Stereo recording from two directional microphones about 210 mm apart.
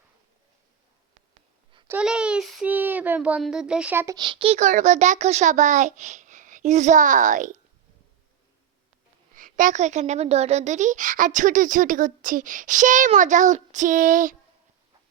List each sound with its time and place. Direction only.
1.9 s a child's voice: 5° right (ahead or behind); by 7.5 s 35° right (ahead or behind)
9.3 s a child's voice: 40° right (ahead or behind)